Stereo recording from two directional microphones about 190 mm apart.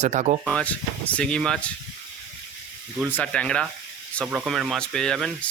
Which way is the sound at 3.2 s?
5° left (ahead or behind).